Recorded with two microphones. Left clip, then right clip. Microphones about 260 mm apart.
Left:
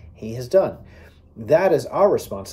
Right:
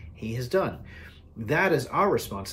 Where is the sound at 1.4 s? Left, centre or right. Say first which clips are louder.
Left 8 dB; centre.